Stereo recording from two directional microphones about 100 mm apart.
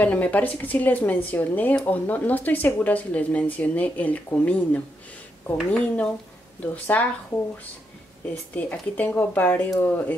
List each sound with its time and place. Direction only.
0.0 s speech: 15° left (ahead or behind)
8.5 s speech: 15° left (ahead or behind)